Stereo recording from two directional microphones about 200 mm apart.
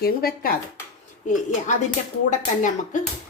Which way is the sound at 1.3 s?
40° left (ahead or behind).